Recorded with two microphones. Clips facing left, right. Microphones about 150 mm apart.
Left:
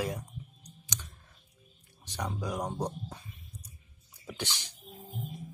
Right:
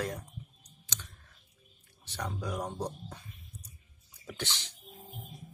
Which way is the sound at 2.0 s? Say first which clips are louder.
Left 2 dB; 10° left (ahead or behind).